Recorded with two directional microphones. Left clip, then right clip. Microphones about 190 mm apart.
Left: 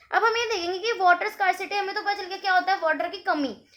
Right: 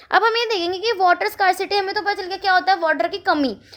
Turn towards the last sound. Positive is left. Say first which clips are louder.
# right 7 dB
turn(degrees=-45)  # may be behind; listen again after turning